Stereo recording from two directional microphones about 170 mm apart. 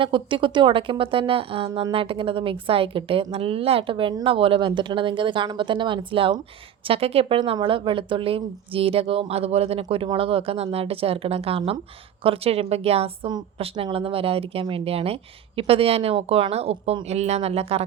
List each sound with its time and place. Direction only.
0.0 s a woman's voice: 30° right (ahead or behind)